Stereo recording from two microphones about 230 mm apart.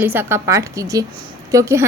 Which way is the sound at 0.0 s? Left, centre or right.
Centre.